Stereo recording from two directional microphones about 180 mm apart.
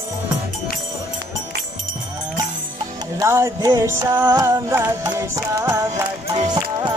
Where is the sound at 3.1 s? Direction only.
15° right (ahead or behind).